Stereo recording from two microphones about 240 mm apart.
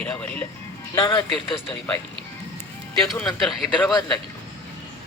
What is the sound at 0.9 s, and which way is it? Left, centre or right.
Speech, centre.